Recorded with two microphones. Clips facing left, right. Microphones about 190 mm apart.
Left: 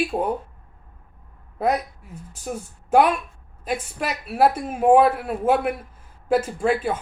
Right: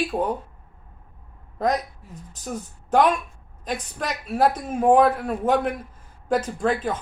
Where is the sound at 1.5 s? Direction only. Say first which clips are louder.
Left 1 dB; 10° left (ahead or behind).